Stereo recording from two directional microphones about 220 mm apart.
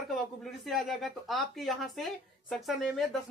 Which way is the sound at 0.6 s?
Centre (ahead or behind).